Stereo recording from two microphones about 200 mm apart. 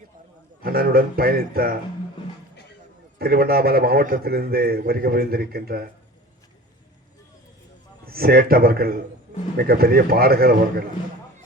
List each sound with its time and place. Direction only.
0.6 s a man's voice: 50° right (ahead or behind)
3.2 s a man's voice: 50° right (ahead or behind)
8.0 s a man's voice: 50° right (ahead or behind)